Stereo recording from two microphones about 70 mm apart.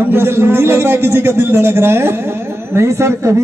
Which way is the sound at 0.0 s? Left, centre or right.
Right.